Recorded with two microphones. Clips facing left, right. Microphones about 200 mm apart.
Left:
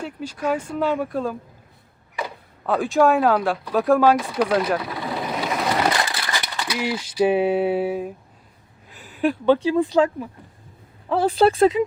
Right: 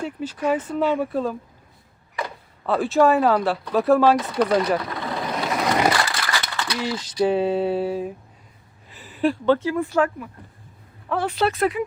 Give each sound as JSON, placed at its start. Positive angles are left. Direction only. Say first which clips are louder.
{"t": 0.2, "sound": "speech", "louder": "right 2 dB", "side_deg": 10}
{"t": 0.8, "sound": "speech", "louder": "right 1 dB", "side_deg": -5}
{"t": 4.1, "sound": "vehicle", "louder": "even", "side_deg": 0}
{"t": 6.0, "sound": "a sound", "louder": "right 1 dB", "side_deg": 20}
{"t": 9.5, "sound": "speech", "louder": "left 6 dB", "side_deg": 15}
{"t": 11.1, "sound": "speech", "louder": "left 5 dB", "side_deg": 30}